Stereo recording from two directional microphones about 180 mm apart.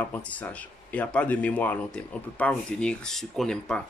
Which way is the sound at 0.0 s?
10° left (ahead or behind).